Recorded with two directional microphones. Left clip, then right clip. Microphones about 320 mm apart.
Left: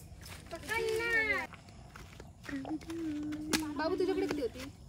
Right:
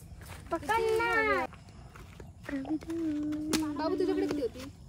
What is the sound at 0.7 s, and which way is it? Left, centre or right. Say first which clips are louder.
Speech: right 4 dB; right.